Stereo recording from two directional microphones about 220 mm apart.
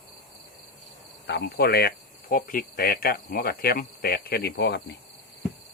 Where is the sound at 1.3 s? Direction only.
50° left (ahead or behind).